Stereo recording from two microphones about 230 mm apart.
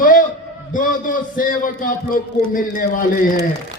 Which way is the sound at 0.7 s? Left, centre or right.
Left.